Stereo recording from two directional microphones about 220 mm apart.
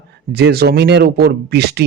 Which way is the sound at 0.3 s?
45° right (ahead or behind).